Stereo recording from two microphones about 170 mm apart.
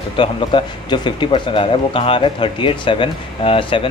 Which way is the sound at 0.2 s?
30° left (ahead or behind).